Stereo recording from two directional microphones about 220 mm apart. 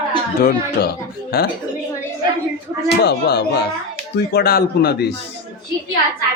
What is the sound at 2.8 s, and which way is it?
Speech, 50° left (ahead or behind).